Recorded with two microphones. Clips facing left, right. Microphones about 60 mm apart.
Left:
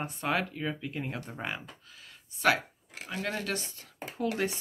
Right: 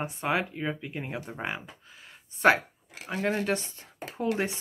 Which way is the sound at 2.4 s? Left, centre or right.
Right.